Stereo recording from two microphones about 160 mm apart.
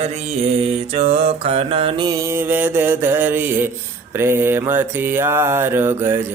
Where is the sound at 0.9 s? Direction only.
40° right (ahead or behind).